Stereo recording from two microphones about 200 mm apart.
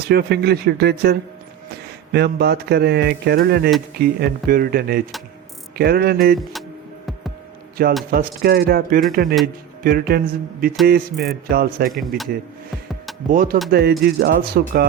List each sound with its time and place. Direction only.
0.1 s speech: 55° right (ahead or behind)
2.1 s speech: 55° right (ahead or behind)
7.8 s speech: 50° right (ahead or behind)
11.9 s a man's voice: centre (ahead or behind)
13.3 s speech: 45° right (ahead or behind)